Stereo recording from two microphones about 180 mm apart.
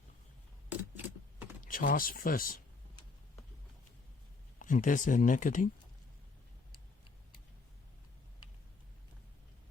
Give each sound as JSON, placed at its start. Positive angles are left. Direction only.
{"t": 0.7, "sound": "keys jangling", "side_deg": -10}
{"t": 1.6, "sound": "speech", "side_deg": 50}
{"t": 4.6, "sound": "speech", "side_deg": 45}